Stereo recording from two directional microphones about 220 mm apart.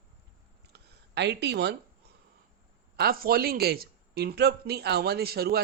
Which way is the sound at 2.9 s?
45° right (ahead or behind).